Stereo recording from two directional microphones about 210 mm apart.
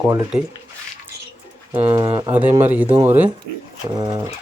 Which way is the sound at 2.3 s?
10° right (ahead or behind).